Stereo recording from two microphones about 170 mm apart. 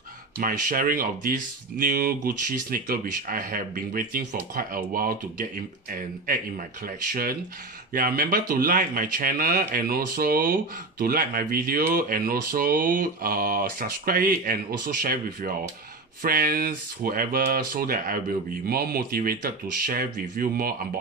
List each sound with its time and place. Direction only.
0.4 s a man's voice: 55° right (ahead or behind)
7.9 s a man's voice: 55° right (ahead or behind)